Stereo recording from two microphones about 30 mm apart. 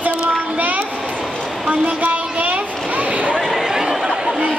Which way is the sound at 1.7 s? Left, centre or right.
Right.